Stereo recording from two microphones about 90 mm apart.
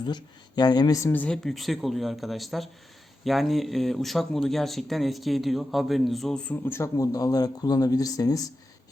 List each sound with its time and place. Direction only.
0.0 s speech: 50° left (ahead or behind)
1.0 s speech: 20° left (ahead or behind)
1.5 s speech: centre (ahead or behind)
6.5 s speech: 25° left (ahead or behind); by 8.5 s 40° left (ahead or behind)